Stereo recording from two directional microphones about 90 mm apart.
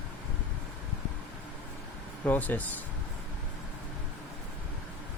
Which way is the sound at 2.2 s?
20° left (ahead or behind).